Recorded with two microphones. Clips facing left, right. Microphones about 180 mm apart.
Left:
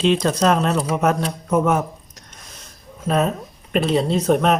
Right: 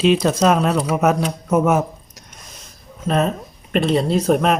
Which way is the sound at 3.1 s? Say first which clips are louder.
Right 1 dB; 5° left (ahead or behind).